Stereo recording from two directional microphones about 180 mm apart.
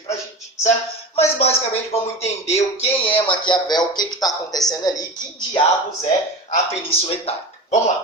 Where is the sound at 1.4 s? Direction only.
35° left (ahead or behind).